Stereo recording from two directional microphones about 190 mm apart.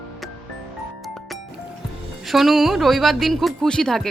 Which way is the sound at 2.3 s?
Centre (ahead or behind).